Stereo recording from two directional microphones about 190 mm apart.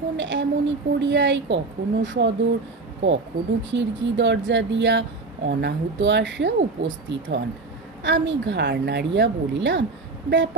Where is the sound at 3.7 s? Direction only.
70° right (ahead or behind).